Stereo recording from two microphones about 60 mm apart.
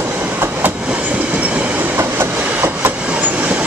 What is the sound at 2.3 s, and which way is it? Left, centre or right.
Train, right.